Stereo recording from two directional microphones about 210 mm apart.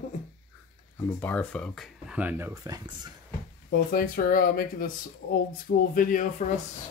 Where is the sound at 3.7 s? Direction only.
45° left (ahead or behind).